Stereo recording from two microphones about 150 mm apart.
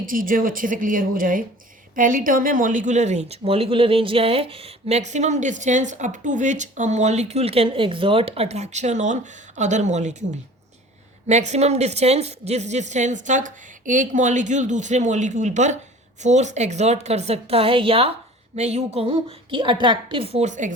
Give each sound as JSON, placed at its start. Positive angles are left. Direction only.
{"t": 0.0, "sound": "speech", "side_deg": -65}
{"t": 11.3, "sound": "a woman's voice", "side_deg": -50}